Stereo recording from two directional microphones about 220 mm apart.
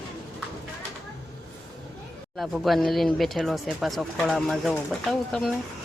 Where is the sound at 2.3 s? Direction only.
Centre (ahead or behind).